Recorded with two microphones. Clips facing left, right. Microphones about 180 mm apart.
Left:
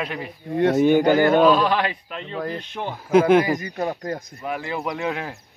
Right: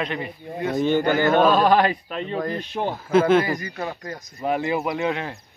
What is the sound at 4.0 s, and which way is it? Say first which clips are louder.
Speech: left 6 dB; 50° left (ahead or behind).